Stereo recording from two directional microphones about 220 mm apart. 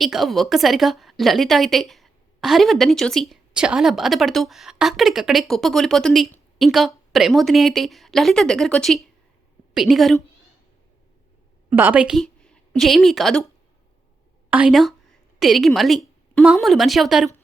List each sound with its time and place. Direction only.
0.0 s a woman's voice: centre (ahead or behind)
11.7 s a woman's voice: 10° right (ahead or behind)
14.5 s a woman's voice: 5° right (ahead or behind)